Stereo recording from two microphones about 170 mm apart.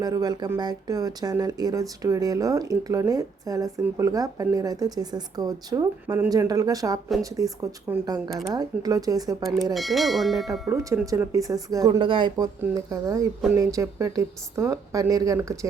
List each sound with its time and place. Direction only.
0.0 s speech: 20° right (ahead or behind)
9.7 s speech: centre (ahead or behind)
10.7 s speech: 15° right (ahead or behind)